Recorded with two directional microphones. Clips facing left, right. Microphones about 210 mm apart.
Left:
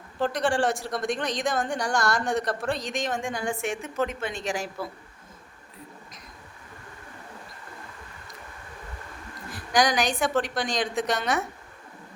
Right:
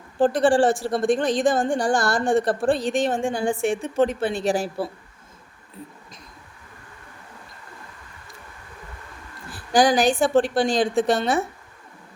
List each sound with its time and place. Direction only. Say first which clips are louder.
0.6 s speech: right 6 dB; centre (ahead or behind)
0.9 s a woman's voice: right 8 dB; 30° right (ahead or behind)
9.5 s a woman's voice: right 5 dB; 30° right (ahead or behind)